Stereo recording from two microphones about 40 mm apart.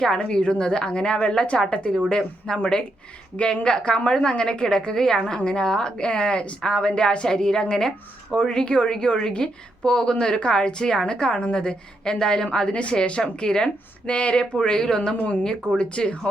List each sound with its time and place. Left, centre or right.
0.0 s a woman's voice: left